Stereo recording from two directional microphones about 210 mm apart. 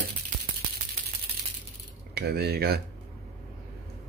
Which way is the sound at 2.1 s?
50° right (ahead or behind).